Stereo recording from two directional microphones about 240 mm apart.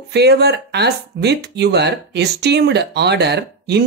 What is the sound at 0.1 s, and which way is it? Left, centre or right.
Speech, right.